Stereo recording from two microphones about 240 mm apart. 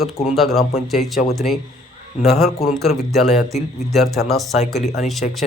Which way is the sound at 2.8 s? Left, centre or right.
Centre.